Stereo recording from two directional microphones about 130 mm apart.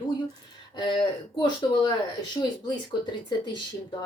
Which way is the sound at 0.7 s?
35° left (ahead or behind).